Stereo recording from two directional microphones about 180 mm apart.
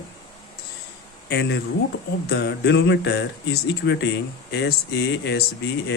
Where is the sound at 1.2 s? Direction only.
70° left (ahead or behind).